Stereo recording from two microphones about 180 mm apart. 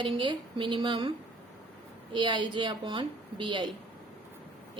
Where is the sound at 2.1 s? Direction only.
25° right (ahead or behind).